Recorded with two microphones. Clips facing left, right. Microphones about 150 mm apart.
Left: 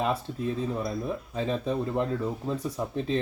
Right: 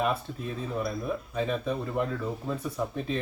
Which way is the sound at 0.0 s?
30° left (ahead or behind).